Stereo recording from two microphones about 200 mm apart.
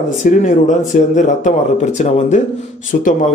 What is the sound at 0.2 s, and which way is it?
A man's voice, 35° left (ahead or behind).